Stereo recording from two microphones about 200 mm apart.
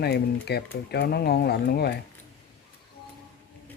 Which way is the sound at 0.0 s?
55° left (ahead or behind).